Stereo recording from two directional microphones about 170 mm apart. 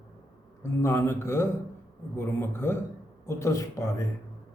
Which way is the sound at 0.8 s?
15° left (ahead or behind).